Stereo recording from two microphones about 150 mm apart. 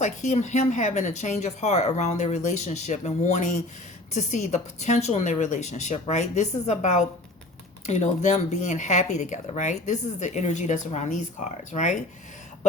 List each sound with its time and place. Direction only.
0.0 s speech: 50° left (ahead or behind)